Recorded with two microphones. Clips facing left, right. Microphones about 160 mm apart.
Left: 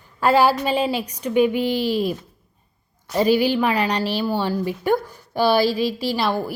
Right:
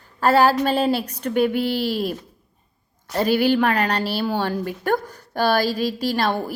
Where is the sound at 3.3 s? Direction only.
50° right (ahead or behind).